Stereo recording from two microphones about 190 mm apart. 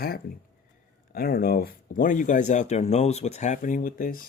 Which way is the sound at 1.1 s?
50° left (ahead or behind).